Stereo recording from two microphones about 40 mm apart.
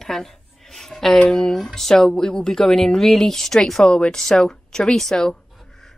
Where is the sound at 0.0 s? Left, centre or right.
Centre.